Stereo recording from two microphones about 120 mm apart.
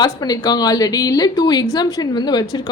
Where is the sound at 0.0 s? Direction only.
35° left (ahead or behind).